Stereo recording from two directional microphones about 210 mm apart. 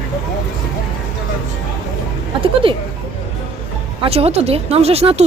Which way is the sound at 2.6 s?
25° right (ahead or behind).